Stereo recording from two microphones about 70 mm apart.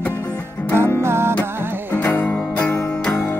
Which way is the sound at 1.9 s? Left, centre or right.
Left.